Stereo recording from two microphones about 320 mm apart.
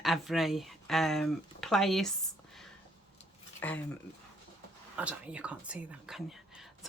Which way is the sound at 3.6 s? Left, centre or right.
Centre.